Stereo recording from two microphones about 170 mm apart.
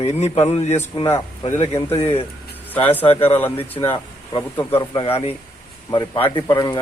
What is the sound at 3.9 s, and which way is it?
A man's voice, 25° left (ahead or behind).